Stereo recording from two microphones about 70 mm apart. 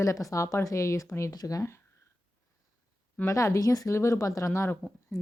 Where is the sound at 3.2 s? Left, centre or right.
Left.